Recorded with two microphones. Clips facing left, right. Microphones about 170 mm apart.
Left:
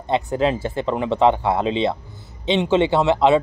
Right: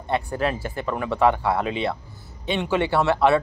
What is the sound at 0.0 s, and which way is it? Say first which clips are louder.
A man's voice: left 4 dB; 20° left (ahead or behind).